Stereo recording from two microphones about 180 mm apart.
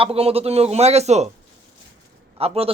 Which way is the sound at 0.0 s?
35° right (ahead or behind).